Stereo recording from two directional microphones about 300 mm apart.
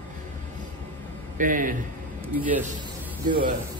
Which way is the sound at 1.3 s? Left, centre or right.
Right.